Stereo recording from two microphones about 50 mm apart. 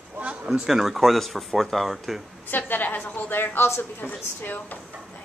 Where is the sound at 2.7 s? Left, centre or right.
Left.